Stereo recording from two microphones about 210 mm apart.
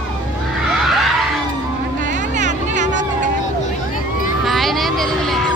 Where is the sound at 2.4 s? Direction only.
35° right (ahead or behind).